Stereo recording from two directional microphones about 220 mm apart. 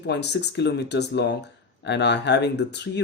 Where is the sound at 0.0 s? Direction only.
50° left (ahead or behind).